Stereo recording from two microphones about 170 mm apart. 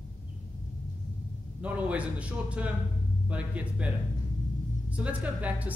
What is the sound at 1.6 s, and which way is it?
Speech, 10° right (ahead or behind).